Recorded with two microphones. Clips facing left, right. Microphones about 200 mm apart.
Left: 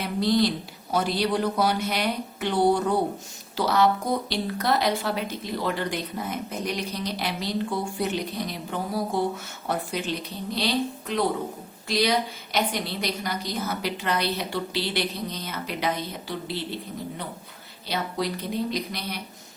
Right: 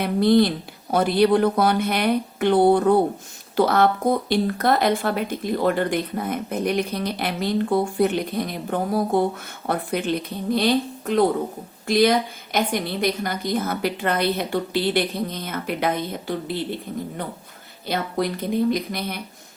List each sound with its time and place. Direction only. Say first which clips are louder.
0.0 s speech: right 6 dB; 55° right (ahead or behind)
17.8 s speech: right 4 dB; 50° right (ahead or behind)